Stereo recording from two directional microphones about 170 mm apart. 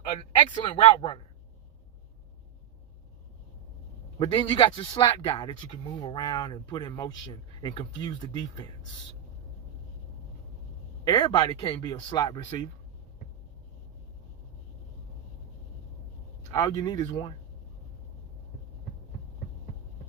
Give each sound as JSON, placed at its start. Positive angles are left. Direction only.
{"t": 0.7, "sound": "speech", "side_deg": 30}
{"t": 4.2, "sound": "speech", "side_deg": 30}
{"t": 11.1, "sound": "speech", "side_deg": 30}
{"t": 16.5, "sound": "speech", "side_deg": 25}